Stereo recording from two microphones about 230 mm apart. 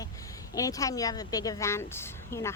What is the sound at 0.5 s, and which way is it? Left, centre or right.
A woman's voice, centre.